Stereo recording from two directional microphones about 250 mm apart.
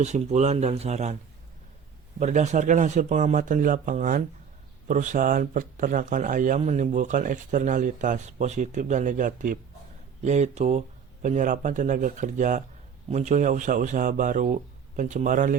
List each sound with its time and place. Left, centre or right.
0.0 s speech: right
2.1 s speech: right